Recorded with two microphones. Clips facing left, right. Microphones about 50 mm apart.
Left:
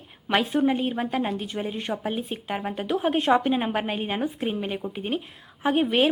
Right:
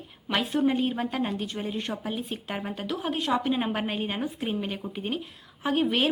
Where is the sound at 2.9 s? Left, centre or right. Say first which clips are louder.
Left 7 dB; left.